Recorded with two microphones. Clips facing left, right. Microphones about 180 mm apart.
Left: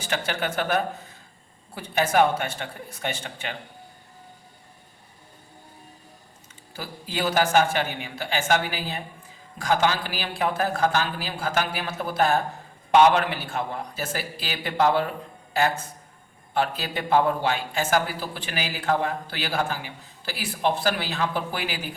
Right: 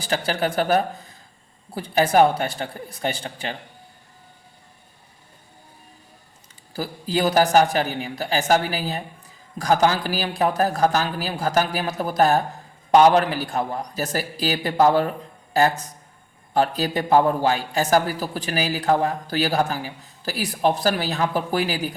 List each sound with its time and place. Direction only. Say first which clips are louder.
0.0 s a man's voice: right 4 dB; 35° right (ahead or behind)
6.7 s a man's voice: right 7 dB; 35° right (ahead or behind)